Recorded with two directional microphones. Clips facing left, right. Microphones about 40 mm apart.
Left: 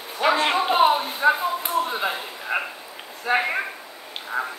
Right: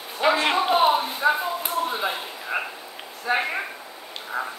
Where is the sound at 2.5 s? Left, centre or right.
Left.